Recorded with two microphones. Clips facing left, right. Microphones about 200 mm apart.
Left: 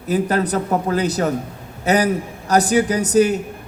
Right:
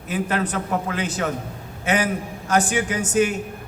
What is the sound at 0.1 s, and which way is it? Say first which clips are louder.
A man's voice: left 5 dB; 40° left (ahead or behind).